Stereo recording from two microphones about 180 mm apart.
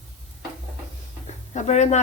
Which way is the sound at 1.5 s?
40° left (ahead or behind).